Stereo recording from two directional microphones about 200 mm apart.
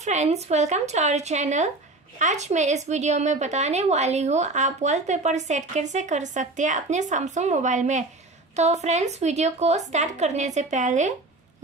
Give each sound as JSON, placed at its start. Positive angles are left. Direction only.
{"t": 0.0, "sound": "a woman's voice", "side_deg": -35}